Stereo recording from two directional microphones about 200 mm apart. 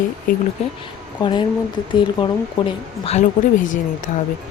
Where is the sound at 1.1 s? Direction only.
20° left (ahead or behind).